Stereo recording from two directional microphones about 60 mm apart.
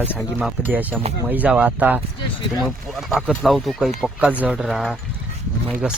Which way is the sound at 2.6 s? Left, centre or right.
Centre.